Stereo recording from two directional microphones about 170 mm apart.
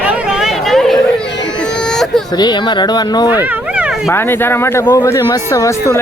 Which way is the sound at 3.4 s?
5° right (ahead or behind).